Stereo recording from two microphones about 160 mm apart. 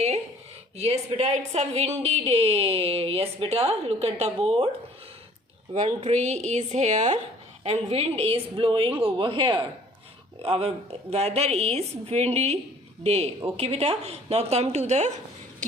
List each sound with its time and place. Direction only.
0.8 s a woman's voice: 40° right (ahead or behind)
6.0 s a woman's voice: 45° right (ahead or behind)